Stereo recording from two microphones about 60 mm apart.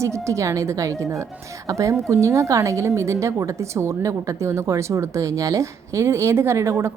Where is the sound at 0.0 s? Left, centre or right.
Right.